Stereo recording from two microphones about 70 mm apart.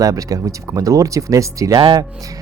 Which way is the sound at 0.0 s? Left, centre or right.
Right.